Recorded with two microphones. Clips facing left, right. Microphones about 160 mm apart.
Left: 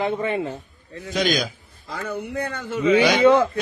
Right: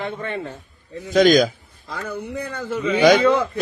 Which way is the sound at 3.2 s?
30° left (ahead or behind).